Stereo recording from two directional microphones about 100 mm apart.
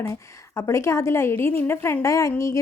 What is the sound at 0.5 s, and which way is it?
A woman's voice, 30° left (ahead or behind).